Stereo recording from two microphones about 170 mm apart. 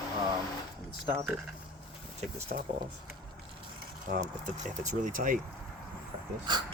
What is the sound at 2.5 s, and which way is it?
Speech, 55° right (ahead or behind).